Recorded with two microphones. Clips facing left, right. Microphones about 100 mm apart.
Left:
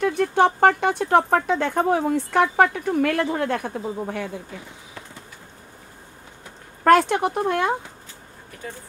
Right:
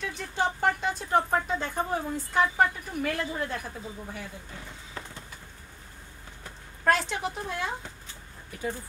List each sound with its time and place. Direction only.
0.0 s speech: 60° left (ahead or behind); by 4.3 s 75° left (ahead or behind)
6.8 s speech: 55° left (ahead or behind)